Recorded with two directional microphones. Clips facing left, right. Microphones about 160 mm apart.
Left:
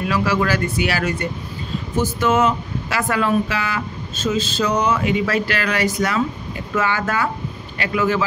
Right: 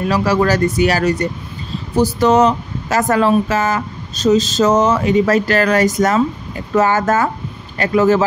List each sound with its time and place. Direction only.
0.1 s speech: 40° right (ahead or behind)